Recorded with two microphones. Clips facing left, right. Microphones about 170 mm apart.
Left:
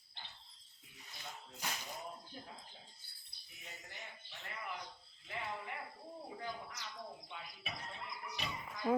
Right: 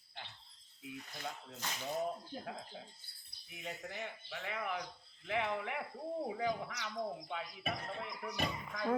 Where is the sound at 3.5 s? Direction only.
75° right (ahead or behind).